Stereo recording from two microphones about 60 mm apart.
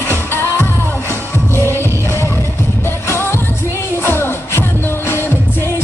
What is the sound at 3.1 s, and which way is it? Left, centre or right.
Music of asia, left.